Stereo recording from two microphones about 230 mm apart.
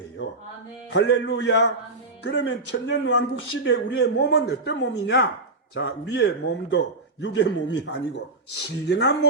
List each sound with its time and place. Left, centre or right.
0.9 s speech: left